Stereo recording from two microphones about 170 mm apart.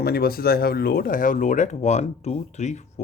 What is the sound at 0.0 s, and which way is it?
Speech, 65° left (ahead or behind).